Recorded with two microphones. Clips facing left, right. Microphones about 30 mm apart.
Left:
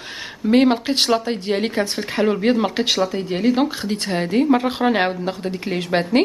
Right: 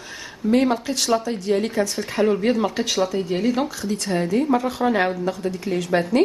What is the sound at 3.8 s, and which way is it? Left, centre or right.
Speech, left.